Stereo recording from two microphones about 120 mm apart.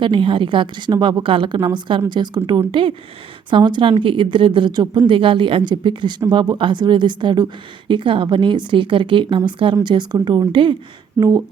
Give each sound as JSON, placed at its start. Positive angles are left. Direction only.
{"t": 0.0, "sound": "a woman's voice", "side_deg": -45}
{"t": 11.2, "sound": "speech", "side_deg": -30}